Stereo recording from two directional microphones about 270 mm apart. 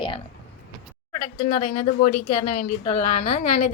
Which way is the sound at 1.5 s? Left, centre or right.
Left.